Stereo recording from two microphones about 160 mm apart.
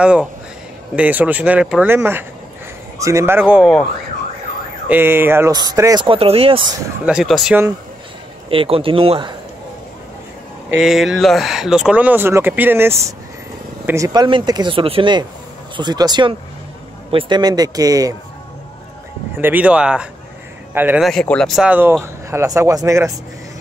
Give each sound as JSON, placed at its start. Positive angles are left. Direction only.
{"t": 0.0, "sound": "speech", "side_deg": -5}
{"t": 4.8, "sound": "speech", "side_deg": -15}
{"t": 5.5, "sound": "speech", "side_deg": -25}
{"t": 7.1, "sound": "speech", "side_deg": 0}
{"t": 8.5, "sound": "speech", "side_deg": -35}
{"t": 10.8, "sound": "speech", "side_deg": 0}
{"t": 19.3, "sound": "speech", "side_deg": -10}
{"t": 21.0, "sound": "speech", "side_deg": 5}